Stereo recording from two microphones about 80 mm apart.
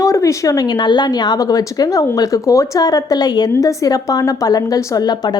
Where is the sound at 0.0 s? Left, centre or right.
Left.